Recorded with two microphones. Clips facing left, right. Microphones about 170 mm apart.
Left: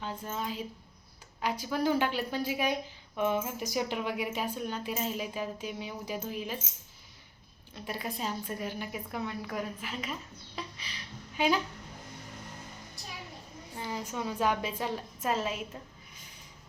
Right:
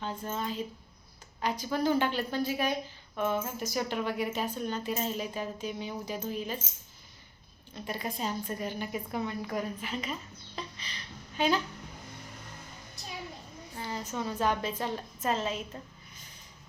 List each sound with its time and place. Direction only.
0.0 s speech: 5° left (ahead or behind)
7.9 s a woman's voice: 5° left (ahead or behind)
13.7 s speech: 15° left (ahead or behind)